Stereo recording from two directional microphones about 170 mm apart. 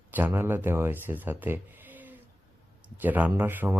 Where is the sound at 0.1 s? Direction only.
10° right (ahead or behind).